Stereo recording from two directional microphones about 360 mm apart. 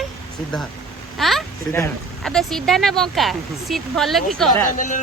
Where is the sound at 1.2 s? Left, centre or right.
Centre.